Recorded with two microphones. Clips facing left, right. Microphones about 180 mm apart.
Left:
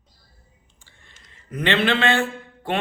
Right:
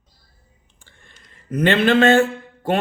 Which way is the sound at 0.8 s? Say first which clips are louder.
Right 4 dB; 50° right (ahead or behind).